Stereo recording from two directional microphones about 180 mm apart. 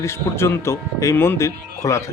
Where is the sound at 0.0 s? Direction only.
15° left (ahead or behind).